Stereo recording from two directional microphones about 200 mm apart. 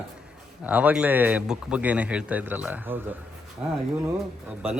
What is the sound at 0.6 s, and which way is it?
A man's voice, 5° right (ahead or behind).